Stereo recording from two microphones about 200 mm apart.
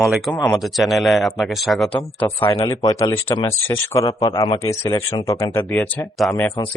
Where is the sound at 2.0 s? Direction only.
10° left (ahead or behind).